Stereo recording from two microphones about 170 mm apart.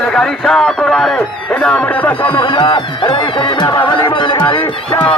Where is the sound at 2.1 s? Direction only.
25° left (ahead or behind).